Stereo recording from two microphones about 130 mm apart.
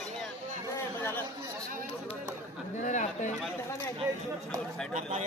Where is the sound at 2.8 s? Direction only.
70° left (ahead or behind).